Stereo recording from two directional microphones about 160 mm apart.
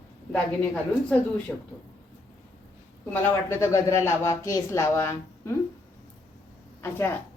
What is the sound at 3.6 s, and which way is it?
Speech, 15° left (ahead or behind).